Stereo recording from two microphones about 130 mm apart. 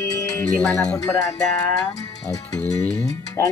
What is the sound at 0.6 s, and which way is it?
Music, 5° left (ahead or behind).